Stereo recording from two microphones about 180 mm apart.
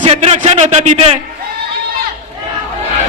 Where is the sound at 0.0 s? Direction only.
35° right (ahead or behind).